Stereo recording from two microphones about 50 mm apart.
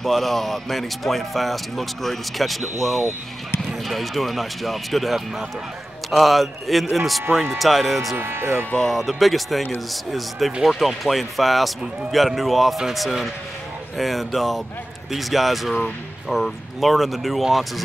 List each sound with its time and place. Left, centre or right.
0.0 s speech: centre
8.2 s speech: right
8.8 s speech: centre
10.6 s speech: centre